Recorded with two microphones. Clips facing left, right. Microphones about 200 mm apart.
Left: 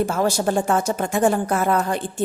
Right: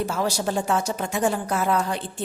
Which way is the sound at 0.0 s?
50° left (ahead or behind).